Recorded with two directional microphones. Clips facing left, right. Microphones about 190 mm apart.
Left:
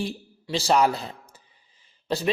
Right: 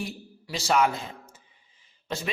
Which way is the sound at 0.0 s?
30° left (ahead or behind).